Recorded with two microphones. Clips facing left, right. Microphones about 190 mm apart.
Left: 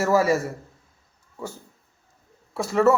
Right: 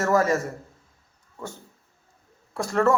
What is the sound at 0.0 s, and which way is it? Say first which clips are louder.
Speech: left 1 dB; 10° left (ahead or behind).